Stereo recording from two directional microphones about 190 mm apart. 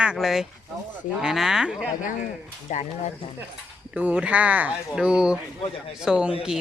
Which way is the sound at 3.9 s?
5° right (ahead or behind).